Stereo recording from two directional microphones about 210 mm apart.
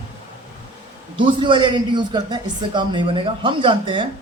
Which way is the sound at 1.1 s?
20° right (ahead or behind).